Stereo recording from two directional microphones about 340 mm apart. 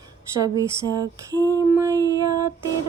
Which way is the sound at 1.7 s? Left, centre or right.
Centre.